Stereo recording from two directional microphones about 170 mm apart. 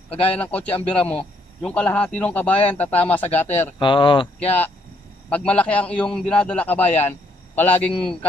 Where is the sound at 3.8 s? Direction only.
30° left (ahead or behind).